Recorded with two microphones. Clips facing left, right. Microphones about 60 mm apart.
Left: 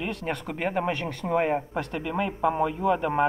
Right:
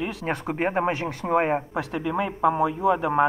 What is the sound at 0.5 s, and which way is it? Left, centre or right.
Speech, right.